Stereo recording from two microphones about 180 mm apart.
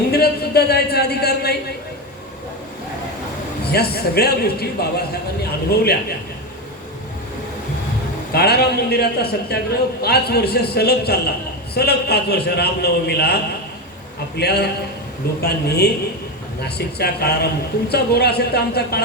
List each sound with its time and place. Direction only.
0.1 s a sound: 60° left (ahead or behind)
3.7 s a man's voice: 60° left (ahead or behind)
8.3 s a man's voice: 60° left (ahead or behind)